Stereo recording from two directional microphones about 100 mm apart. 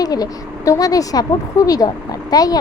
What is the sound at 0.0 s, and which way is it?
A woman's voice, 40° left (ahead or behind).